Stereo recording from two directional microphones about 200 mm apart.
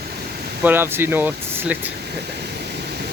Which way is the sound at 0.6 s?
10° right (ahead or behind).